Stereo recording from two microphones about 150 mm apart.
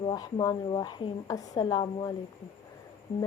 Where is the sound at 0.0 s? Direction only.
25° left (ahead or behind).